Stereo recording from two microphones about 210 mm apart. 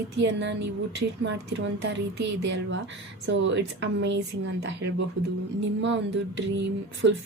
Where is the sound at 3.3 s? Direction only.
60° right (ahead or behind).